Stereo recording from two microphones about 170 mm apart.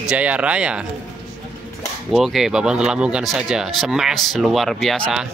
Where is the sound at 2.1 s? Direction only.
Centre (ahead or behind).